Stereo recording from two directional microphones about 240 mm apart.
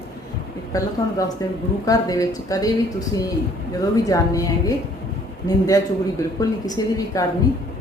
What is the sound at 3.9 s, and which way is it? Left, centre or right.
A woman's voice, centre.